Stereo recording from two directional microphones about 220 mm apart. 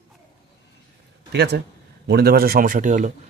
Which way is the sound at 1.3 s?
50° right (ahead or behind).